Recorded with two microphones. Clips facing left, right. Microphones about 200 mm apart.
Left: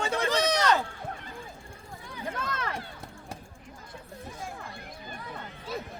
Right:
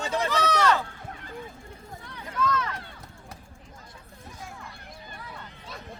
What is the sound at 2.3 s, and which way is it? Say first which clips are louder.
Run: right 8 dB; 55° left (ahead or behind).